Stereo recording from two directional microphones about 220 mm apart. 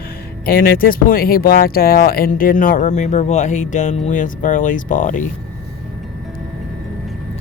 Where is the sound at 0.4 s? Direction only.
40° left (ahead or behind).